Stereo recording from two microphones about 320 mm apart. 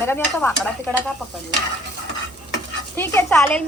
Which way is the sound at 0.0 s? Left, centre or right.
Centre.